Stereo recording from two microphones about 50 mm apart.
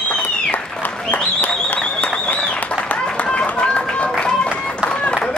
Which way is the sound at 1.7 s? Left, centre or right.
Left.